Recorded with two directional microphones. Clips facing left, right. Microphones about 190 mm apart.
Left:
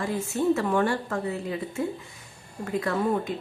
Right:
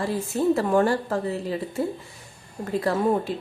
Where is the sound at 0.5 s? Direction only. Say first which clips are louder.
Right 5 dB; 40° right (ahead or behind).